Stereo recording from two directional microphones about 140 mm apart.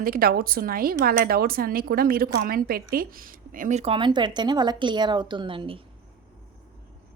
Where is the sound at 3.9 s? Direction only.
35° right (ahead or behind).